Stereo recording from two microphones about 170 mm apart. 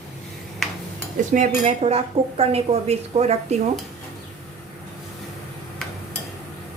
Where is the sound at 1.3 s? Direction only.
45° right (ahead or behind).